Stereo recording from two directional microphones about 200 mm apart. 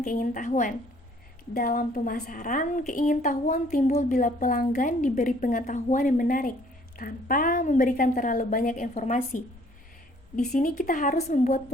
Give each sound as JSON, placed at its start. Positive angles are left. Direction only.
{"t": 0.0, "sound": "a woman's voice", "side_deg": 40}